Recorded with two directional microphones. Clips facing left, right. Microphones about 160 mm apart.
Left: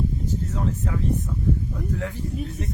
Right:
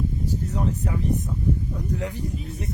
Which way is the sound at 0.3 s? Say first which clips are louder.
Right 1 dB; 15° right (ahead or behind).